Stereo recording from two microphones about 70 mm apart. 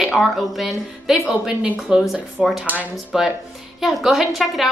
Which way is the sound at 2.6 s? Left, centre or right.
Right.